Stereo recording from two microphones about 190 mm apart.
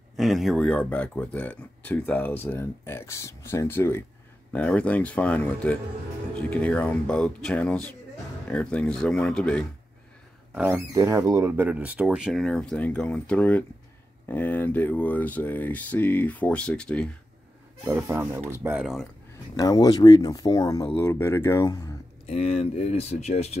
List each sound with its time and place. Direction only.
0.2 s speech: centre (ahead or behind)
10.7 s speech: 15° right (ahead or behind); by 17.1 s 5° left (ahead or behind)
17.8 s speech: 15° right (ahead or behind)
19.5 s speech: 20° left (ahead or behind)
22.2 s speech: 30° left (ahead or behind)